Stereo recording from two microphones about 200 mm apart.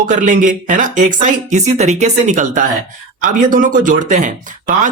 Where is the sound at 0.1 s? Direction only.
40° right (ahead or behind).